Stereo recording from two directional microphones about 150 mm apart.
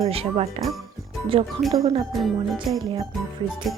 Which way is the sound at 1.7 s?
25° right (ahead or behind).